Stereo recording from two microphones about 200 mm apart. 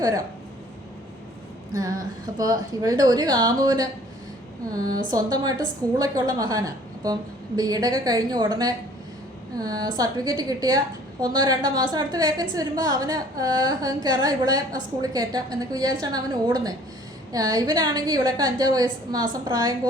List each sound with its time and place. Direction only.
1.7 s a sound: 15° right (ahead or behind)
2.4 s a woman's voice: 20° right (ahead or behind)
5.1 s a woman's voice: 20° right (ahead or behind)